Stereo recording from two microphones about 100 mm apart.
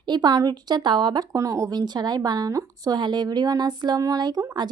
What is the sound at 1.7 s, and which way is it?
Speech, 45° right (ahead or behind).